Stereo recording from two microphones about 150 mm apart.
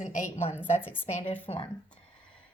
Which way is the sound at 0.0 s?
55° left (ahead or behind).